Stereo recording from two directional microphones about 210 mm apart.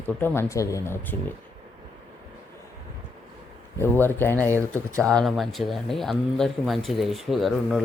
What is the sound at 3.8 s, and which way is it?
Speech, 10° left (ahead or behind).